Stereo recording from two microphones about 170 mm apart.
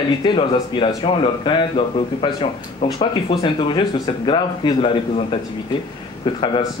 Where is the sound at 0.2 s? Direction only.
30° left (ahead or behind).